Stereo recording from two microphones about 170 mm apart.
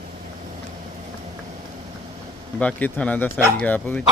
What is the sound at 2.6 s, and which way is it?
Speech, 10° left (ahead or behind).